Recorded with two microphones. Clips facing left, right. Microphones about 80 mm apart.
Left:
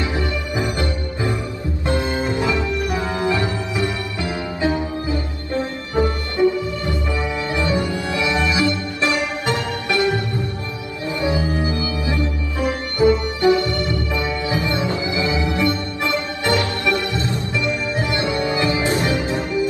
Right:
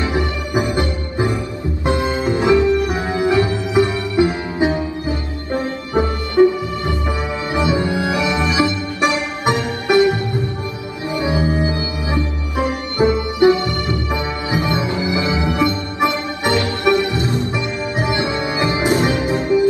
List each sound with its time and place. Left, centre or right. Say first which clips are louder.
0.0 s music: right 3 dB; right
11.1 s organ: right 2 dB; right
13.0 s music: right 2 dB; right